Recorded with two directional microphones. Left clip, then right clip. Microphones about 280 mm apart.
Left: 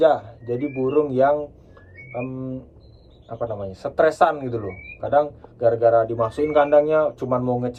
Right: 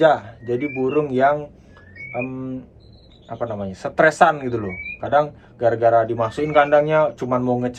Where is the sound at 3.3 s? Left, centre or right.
Right.